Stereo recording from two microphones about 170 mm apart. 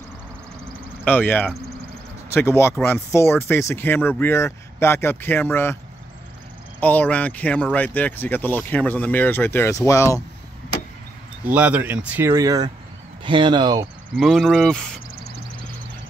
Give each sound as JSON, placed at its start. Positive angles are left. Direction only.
{"t": 1.0, "sound": "speech", "side_deg": 10}
{"t": 6.8, "sound": "speech", "side_deg": 10}
{"t": 11.4, "sound": "speech", "side_deg": -10}
{"t": 14.1, "sound": "speech", "side_deg": 0}